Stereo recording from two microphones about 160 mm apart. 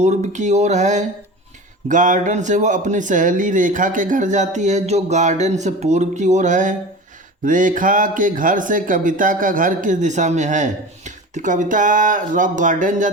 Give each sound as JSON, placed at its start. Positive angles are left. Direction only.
{"t": 0.0, "sound": "speech", "side_deg": -45}